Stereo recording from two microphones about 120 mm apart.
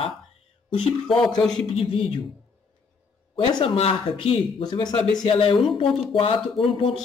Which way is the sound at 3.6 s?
55° left (ahead or behind).